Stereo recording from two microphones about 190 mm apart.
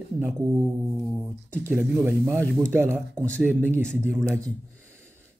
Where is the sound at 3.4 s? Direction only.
10° right (ahead or behind).